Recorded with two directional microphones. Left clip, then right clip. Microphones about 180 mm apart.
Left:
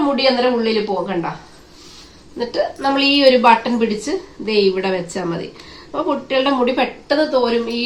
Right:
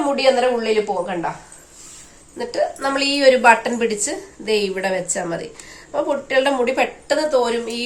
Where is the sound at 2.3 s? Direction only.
25° right (ahead or behind).